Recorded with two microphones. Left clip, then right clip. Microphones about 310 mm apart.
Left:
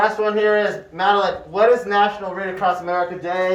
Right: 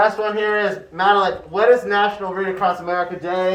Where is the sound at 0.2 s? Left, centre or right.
Centre.